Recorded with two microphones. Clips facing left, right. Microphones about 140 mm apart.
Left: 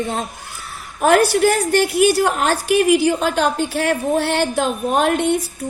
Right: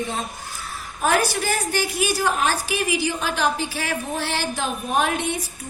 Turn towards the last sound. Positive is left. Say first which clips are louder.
# left 6 dB
turn(degrees=55)  # may be behind; listen again after turning